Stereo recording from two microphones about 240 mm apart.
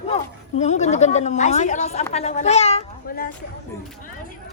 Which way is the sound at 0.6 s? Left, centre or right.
Left.